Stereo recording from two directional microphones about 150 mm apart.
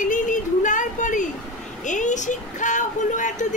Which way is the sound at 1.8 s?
55° left (ahead or behind).